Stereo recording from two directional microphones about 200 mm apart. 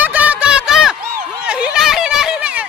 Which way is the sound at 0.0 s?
10° right (ahead or behind).